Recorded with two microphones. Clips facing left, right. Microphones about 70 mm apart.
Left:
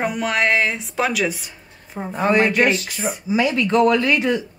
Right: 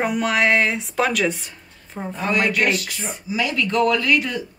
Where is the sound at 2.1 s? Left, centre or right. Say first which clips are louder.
Left 4 dB; left.